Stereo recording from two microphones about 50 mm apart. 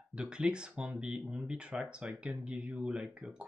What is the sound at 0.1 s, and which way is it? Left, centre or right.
Speech, centre.